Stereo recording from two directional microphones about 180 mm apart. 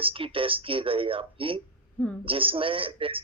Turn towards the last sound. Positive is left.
turn(degrees=-30)  # may be behind; listen again after turning